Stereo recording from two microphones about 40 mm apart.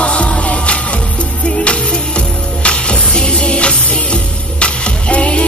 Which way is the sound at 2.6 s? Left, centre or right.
Left.